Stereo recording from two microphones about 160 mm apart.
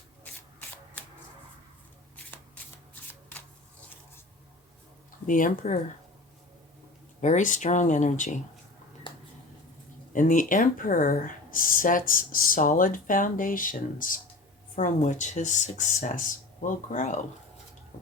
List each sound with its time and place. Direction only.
5.2 s speech: 55° left (ahead or behind)
7.2 s speech: 50° left (ahead or behind)
10.1 s speech: 55° left (ahead or behind)
17.9 s water: 50° left (ahead or behind)